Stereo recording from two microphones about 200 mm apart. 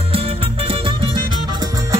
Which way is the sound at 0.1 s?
30° right (ahead or behind).